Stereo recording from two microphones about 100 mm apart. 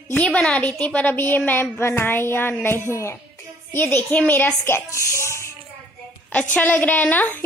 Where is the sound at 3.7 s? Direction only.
15° left (ahead or behind).